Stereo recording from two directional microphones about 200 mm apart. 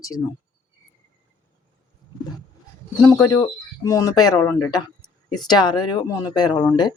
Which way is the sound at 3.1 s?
15° left (ahead or behind).